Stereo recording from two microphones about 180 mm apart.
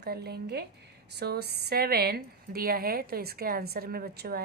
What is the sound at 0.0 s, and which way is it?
A woman's voice, 65° right (ahead or behind).